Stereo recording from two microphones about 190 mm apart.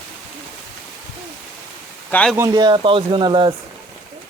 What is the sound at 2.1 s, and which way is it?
Speech, 5° left (ahead or behind).